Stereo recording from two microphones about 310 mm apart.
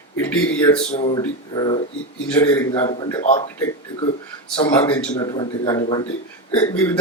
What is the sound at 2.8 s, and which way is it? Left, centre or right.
Speech, centre.